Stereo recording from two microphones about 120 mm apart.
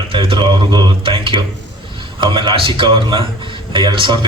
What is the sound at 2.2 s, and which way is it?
A man's voice, 40° right (ahead or behind).